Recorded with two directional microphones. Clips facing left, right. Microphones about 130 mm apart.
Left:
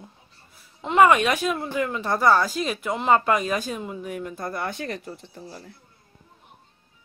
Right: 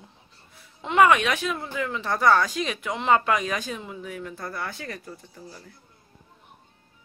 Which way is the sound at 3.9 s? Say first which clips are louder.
Left 4 dB; 45° left (ahead or behind).